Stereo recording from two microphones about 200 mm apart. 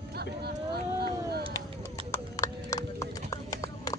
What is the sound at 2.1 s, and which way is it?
Clip-clop, 15° left (ahead or behind).